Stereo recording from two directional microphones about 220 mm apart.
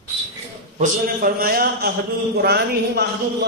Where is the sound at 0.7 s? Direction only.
40° right (ahead or behind).